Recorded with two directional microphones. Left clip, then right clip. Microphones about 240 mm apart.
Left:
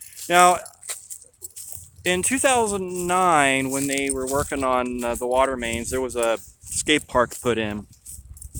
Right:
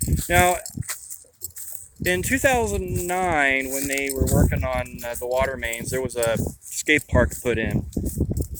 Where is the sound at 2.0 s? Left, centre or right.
Centre.